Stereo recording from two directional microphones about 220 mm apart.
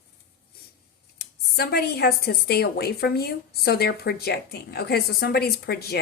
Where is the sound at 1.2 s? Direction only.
45° left (ahead or behind).